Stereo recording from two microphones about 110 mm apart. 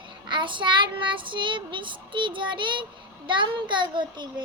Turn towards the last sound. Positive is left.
turn(degrees=-45)  # may be behind; listen again after turning